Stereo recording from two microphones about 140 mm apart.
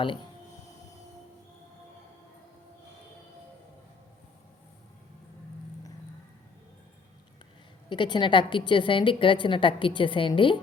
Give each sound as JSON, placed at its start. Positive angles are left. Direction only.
{"t": 7.9, "sound": "a woman's voice", "side_deg": 35}